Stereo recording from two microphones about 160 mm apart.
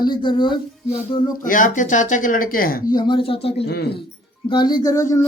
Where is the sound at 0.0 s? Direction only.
30° left (ahead or behind).